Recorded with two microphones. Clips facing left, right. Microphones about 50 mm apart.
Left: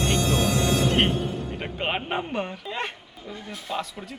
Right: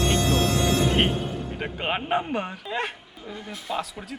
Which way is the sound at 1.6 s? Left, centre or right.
Centre.